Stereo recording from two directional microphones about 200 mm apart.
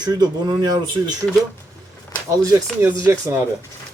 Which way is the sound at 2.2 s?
15° right (ahead or behind).